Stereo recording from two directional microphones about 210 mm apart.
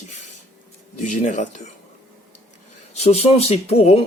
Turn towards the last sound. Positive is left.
turn(degrees=30)  # may be behind; listen again after turning